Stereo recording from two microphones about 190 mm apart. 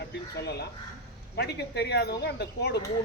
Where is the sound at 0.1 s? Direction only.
60° left (ahead or behind).